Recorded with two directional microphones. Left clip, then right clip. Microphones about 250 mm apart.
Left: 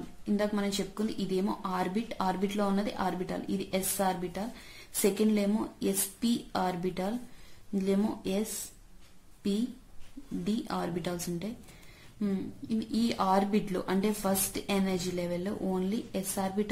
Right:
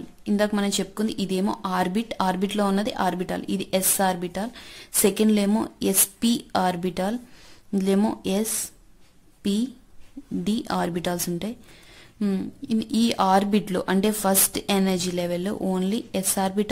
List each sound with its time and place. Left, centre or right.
0.2 s speech: right
10.4 s speech: right